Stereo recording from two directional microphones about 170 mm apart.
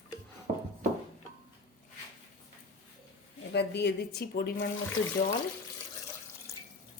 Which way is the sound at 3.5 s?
80° left.